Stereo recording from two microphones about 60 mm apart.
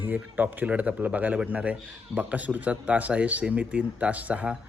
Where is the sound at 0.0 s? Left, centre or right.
Right.